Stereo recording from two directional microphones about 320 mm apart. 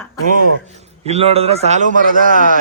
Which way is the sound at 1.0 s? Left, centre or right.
Centre.